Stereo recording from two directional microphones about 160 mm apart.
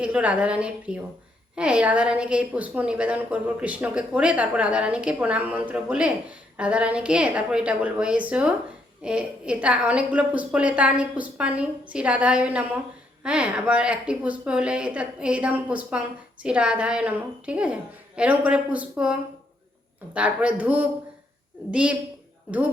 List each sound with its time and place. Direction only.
0.0 s a woman's voice: 10° right (ahead or behind)
20.1 s a woman's voice: 10° right (ahead or behind)